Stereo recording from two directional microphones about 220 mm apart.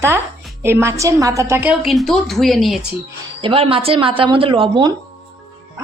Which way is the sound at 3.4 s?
25° right (ahead or behind).